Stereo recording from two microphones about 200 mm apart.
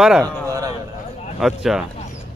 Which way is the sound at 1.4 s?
Centre (ahead or behind).